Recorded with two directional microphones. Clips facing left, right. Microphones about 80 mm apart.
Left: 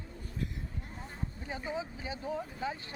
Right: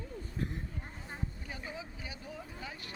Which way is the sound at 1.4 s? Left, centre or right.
Left.